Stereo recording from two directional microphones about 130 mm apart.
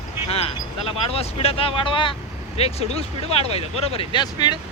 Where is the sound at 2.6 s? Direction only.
50° left (ahead or behind).